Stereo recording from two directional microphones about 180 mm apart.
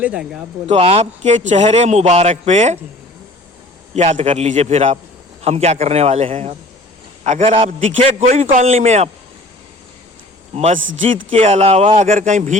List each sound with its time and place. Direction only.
0.0 s speech: 5° right (ahead or behind)
0.7 s a man's voice: 35° right (ahead or behind)
3.9 s a man's voice: 40° right (ahead or behind)
7.5 s a man's voice: 30° right (ahead or behind)
8.2 s a man's voice: 50° right (ahead or behind)
10.5 s a man's voice: 35° right (ahead or behind)